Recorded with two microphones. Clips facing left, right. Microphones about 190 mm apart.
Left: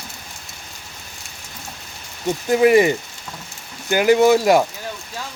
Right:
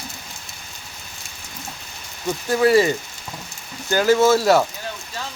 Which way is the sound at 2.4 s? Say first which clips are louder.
Left 2 dB; 20° left (ahead or behind).